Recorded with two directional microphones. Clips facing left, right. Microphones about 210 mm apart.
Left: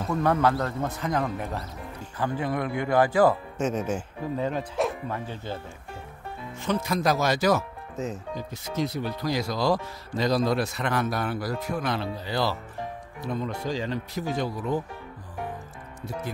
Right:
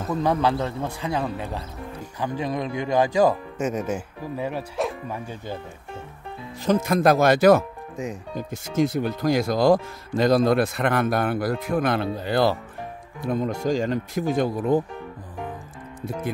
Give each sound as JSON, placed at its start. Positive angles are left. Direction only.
{"t": 0.1, "sound": "speech", "side_deg": -15}
{"t": 6.6, "sound": "speech", "side_deg": -45}
{"t": 7.9, "sound": "speech", "side_deg": -15}
{"t": 8.4, "sound": "speech", "side_deg": -50}